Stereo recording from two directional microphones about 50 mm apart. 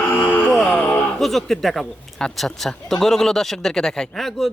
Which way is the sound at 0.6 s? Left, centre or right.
Centre.